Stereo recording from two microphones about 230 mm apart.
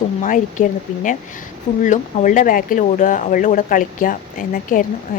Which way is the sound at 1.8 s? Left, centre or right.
Left.